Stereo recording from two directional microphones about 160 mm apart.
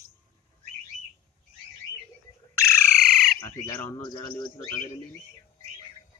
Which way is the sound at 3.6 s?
15° left (ahead or behind).